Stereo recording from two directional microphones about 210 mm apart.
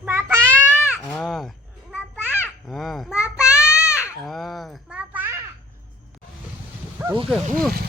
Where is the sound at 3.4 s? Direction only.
5° right (ahead or behind).